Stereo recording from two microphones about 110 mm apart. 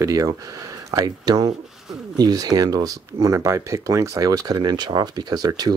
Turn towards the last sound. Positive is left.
turn(degrees=-35)  # may be behind; listen again after turning